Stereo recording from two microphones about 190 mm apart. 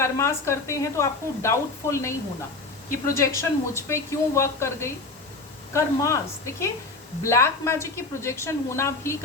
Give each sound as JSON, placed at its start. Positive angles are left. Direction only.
{"t": 0.0, "sound": "speech", "side_deg": 15}